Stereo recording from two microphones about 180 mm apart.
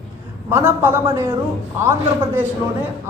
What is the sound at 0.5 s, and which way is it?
A woman's voice, 15° right (ahead or behind).